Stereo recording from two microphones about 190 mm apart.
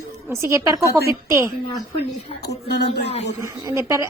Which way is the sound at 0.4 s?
15° right (ahead or behind).